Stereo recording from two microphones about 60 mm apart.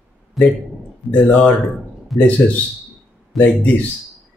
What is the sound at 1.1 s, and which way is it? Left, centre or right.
Speech, left.